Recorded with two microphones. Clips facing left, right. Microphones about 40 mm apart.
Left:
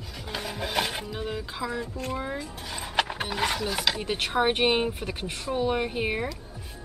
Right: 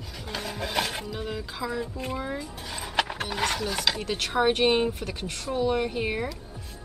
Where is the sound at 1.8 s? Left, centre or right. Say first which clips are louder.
Even; centre.